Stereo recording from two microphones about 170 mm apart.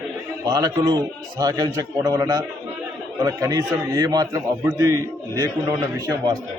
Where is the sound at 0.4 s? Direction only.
25° right (ahead or behind).